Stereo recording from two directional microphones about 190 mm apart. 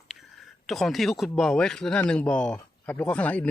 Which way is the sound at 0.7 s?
Centre (ahead or behind).